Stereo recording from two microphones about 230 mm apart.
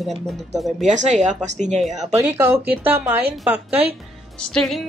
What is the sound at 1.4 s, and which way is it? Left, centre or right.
Speech, right.